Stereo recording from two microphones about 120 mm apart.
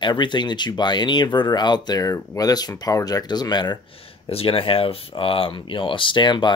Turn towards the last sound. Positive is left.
turn(degrees=40)  # may be behind; listen again after turning